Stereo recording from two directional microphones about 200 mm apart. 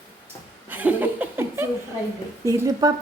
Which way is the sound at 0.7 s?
10° right (ahead or behind).